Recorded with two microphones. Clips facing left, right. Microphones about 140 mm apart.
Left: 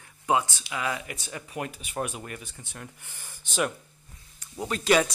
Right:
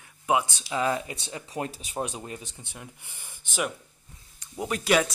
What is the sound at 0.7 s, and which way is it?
Speech, 35° right (ahead or behind).